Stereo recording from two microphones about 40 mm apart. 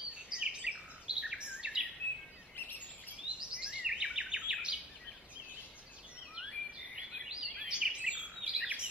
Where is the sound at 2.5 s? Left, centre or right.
Left.